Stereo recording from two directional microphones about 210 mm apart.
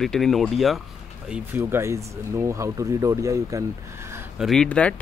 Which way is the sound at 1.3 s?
10° right (ahead or behind).